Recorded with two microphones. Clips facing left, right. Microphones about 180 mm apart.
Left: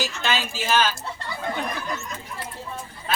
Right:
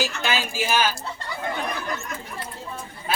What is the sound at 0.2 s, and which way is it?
Speech, 10° right (ahead or behind).